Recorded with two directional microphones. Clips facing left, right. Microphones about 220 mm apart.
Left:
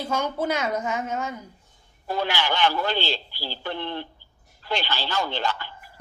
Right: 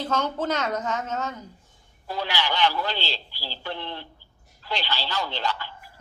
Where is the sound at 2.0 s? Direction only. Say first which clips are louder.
Left 3 dB; 50° left (ahead or behind).